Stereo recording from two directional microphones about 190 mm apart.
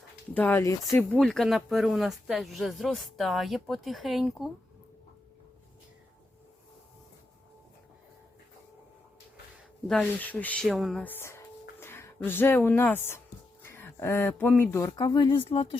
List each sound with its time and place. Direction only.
0.3 s speech: 10° left (ahead or behind)
1.2 s speech: centre (ahead or behind)
9.8 s speech: 5° left (ahead or behind)
14.8 s speech: 20° left (ahead or behind)